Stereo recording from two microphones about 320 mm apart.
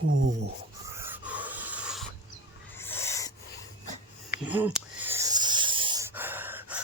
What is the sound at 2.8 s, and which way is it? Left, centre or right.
Owl, centre.